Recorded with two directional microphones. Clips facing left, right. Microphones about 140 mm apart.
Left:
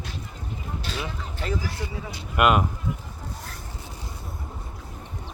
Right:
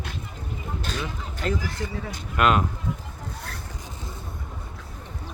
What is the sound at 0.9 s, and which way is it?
Speech, 45° right (ahead or behind).